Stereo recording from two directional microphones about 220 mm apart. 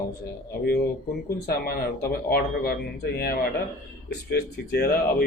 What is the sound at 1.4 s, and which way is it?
Speech, 45° left (ahead or behind).